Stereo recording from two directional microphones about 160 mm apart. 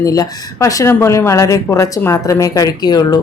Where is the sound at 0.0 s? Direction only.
20° left (ahead or behind).